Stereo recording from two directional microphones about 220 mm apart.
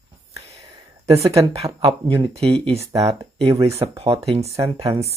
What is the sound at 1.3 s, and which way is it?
Speech, 25° right (ahead or behind).